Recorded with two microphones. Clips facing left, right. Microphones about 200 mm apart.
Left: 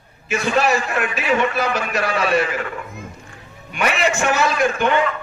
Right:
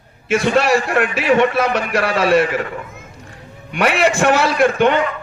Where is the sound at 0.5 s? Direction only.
60° right (ahead or behind).